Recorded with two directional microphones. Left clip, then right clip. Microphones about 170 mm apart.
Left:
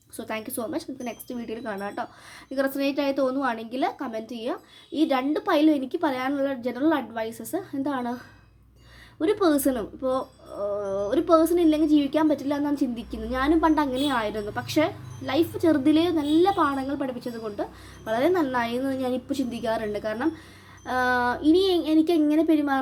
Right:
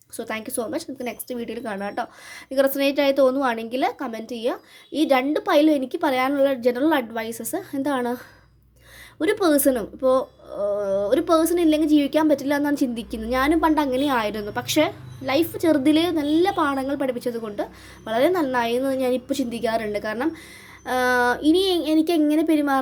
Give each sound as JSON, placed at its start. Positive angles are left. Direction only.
{"t": 0.2, "sound": "speech", "side_deg": -20}